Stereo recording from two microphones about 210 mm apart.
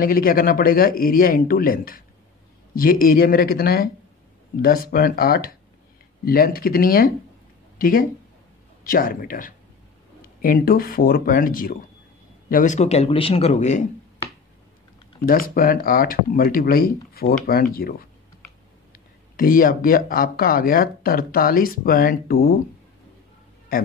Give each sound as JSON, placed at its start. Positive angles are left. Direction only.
{"t": 0.0, "sound": "a man's voice", "side_deg": 45}
{"t": 15.2, "sound": "speech", "side_deg": 45}
{"t": 23.7, "sound": "speech", "side_deg": 45}